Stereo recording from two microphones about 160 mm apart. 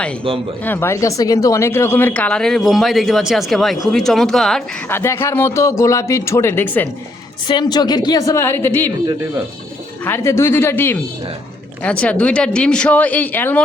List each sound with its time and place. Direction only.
0.3 s speech: 35° right (ahead or behind)
0.6 s speech: 15° left (ahead or behind)
4.9 s speech: 15° left (ahead or behind)
7.4 s a woman's voice: 25° left (ahead or behind)
10.0 s speech: 15° left (ahead or behind)